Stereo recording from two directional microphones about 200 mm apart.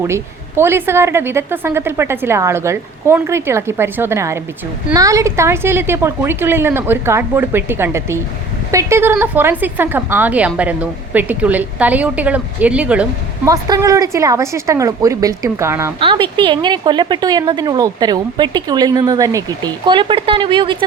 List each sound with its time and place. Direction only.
0.0 s a woman's voice: 10° right (ahead or behind)
13.5 s a woman's voice: 15° right (ahead or behind)
16.0 s a woman's voice: 25° right (ahead or behind)